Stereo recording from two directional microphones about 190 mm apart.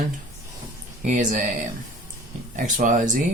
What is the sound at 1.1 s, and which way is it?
Speech, 40° right (ahead or behind).